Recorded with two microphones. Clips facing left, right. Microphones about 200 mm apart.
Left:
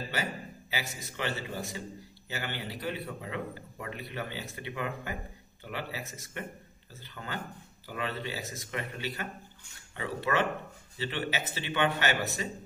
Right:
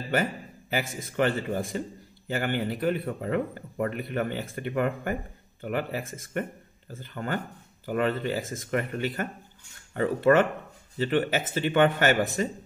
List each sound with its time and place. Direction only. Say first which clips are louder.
0.1 s a man's voice: right 8 dB; 50° right (ahead or behind)